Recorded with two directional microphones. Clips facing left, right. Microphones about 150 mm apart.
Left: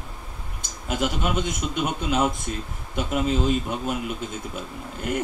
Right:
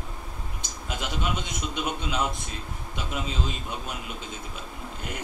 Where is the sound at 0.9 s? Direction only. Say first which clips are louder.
Left 6 dB; 50° left (ahead or behind).